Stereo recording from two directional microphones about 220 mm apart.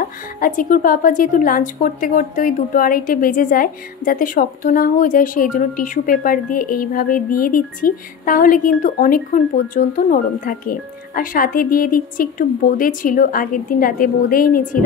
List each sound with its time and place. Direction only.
0.4 s speech: 40° left (ahead or behind)